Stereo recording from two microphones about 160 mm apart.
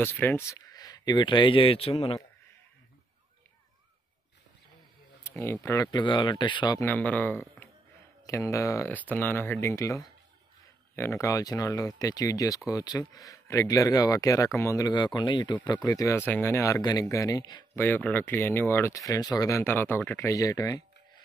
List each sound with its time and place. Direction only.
0.0 s speech: 15° left (ahead or behind); by 2.1 s 40° left (ahead or behind)
5.2 s speech: 15° left (ahead or behind)
6.9 s speech: 10° left (ahead or behind)
17.7 s speech: 10° left (ahead or behind)